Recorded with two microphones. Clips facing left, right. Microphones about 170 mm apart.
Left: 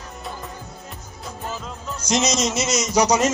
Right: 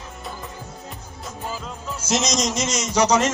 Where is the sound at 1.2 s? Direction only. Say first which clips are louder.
Even; 5° right (ahead or behind).